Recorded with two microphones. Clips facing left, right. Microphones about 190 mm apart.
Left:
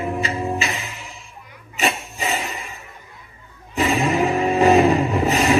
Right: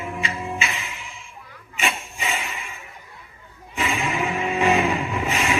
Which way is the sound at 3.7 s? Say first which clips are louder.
Left 6 dB; 40° left (ahead or behind).